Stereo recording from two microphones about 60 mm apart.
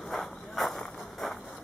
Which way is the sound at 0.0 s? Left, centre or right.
Centre.